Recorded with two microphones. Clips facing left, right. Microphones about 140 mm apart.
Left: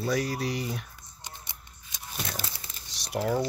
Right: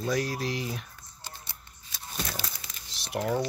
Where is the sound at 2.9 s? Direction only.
Centre (ahead or behind).